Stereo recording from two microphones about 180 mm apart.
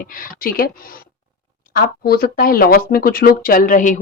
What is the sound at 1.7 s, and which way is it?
Speech, 55° left (ahead or behind).